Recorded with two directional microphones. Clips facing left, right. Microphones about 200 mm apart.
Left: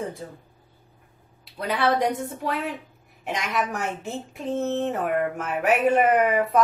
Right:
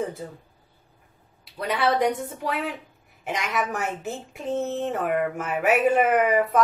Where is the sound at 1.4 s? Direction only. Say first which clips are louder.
Even; centre (ahead or behind).